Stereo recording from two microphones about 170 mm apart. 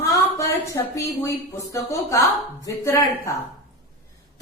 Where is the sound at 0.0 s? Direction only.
20° left (ahead or behind).